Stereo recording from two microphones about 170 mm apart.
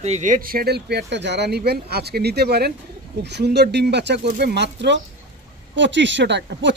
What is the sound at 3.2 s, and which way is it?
Speech, 80° right.